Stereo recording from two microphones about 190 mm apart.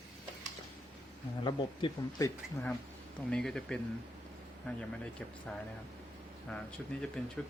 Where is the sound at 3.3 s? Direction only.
5° left (ahead or behind).